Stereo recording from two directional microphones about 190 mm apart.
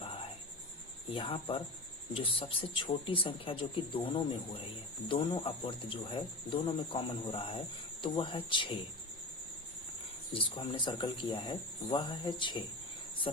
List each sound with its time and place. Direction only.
1.1 s speech: 30° left (ahead or behind)
10.3 s speech: 25° left (ahead or behind)